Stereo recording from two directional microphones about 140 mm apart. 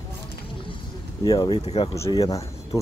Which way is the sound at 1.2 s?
30° left (ahead or behind).